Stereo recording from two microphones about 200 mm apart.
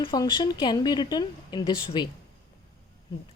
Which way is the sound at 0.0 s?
25° left (ahead or behind).